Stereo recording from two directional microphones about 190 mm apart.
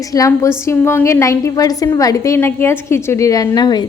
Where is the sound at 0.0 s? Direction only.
20° left (ahead or behind).